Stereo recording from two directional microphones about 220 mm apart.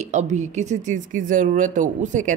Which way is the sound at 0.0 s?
30° right (ahead or behind).